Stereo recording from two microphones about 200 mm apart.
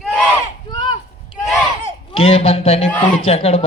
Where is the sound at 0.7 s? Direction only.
25° left (ahead or behind).